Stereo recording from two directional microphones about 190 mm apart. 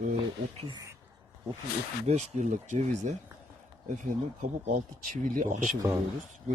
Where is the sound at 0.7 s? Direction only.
20° right (ahead or behind).